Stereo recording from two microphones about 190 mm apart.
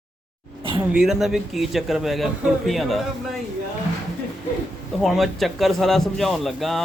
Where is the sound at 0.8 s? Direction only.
5° right (ahead or behind).